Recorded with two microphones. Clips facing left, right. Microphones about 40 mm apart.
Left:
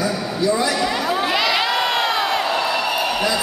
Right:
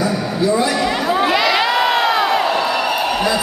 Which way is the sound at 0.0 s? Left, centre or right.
Centre.